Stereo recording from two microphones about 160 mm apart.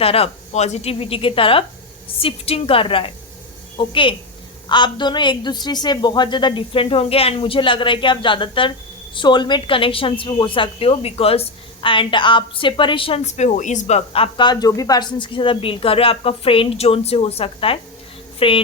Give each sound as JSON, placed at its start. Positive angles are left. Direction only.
{"t": 0.0, "sound": "a woman's voice", "side_deg": 35}